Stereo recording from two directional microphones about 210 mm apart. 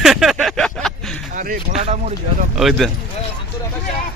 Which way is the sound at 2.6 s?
Centre (ahead or behind).